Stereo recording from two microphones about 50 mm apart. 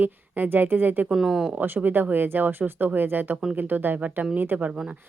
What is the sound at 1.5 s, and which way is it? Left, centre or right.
Speech, right.